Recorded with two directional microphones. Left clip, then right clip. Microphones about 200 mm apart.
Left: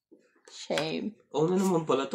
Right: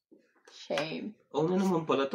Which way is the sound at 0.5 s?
55° left (ahead or behind).